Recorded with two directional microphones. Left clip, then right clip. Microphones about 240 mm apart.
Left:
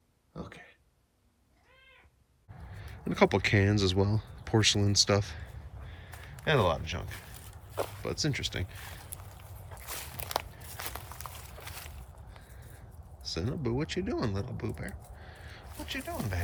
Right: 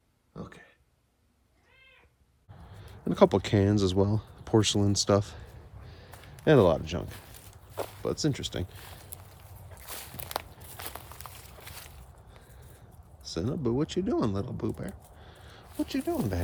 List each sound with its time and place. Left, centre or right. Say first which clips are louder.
2.7 s speech: right 3 dB; centre
6.4 s speech: right 6 dB; centre
7.8 s speech: right 2 dB; centre
9.6 s walk: left 1 dB; centre
13.2 s speech: right 3 dB; centre